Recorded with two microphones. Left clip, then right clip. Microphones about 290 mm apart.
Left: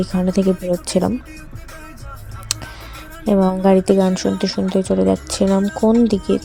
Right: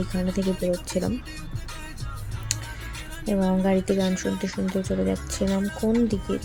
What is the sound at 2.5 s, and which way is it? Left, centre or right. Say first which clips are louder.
Music: left 7 dB; left.